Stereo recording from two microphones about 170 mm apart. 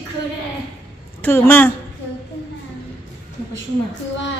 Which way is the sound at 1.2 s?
10° left (ahead or behind).